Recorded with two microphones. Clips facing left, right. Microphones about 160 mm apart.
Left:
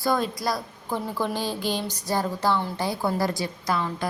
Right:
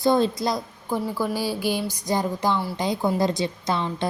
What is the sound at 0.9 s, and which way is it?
Speech, 10° right (ahead or behind).